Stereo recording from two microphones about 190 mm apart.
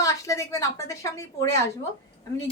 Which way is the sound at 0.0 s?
15° left (ahead or behind).